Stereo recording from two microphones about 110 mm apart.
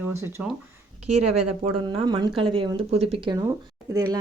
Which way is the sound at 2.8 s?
70° right (ahead or behind).